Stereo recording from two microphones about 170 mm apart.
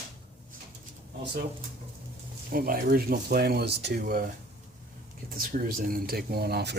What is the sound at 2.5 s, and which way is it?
Speech, 60° right (ahead or behind).